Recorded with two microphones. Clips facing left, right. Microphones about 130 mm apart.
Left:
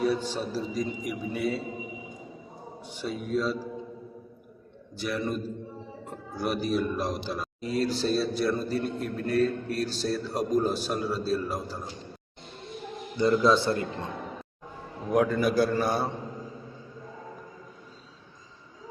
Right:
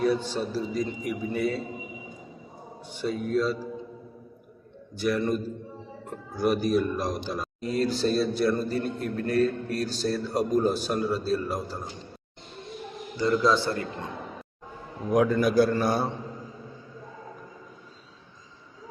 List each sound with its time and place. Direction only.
0.0 s a man's voice: 10° left (ahead or behind)
3.0 s a man's voice: 10° left (ahead or behind)
4.9 s a man's voice: centre (ahead or behind)
13.1 s a man's voice: 20° left (ahead or behind)
15.1 s a man's voice: centre (ahead or behind)